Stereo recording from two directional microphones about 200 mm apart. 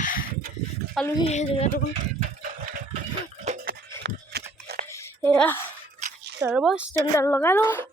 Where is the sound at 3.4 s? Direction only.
45° right (ahead or behind).